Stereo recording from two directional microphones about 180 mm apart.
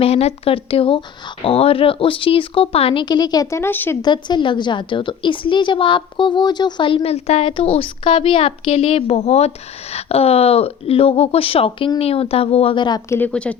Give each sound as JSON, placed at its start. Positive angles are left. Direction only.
{"t": 0.0, "sound": "a woman's voice", "side_deg": 35}
{"t": 4.0, "sound": "a woman's voice", "side_deg": 25}
{"t": 13.1, "sound": "speech", "side_deg": 10}